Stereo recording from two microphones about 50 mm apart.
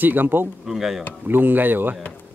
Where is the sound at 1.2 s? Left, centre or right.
Right.